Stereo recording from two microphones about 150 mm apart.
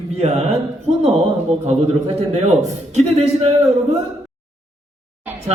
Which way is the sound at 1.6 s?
45° right (ahead or behind).